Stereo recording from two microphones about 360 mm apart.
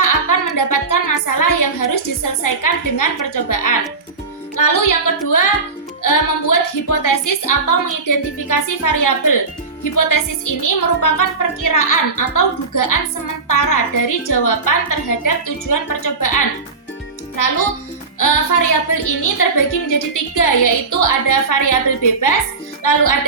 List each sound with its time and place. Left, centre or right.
0.0 s a woman's voice: left